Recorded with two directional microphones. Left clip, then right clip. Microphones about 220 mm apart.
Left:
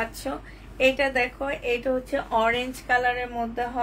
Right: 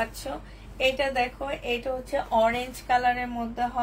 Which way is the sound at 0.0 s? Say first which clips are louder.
Left 1 dB; 35° left (ahead or behind).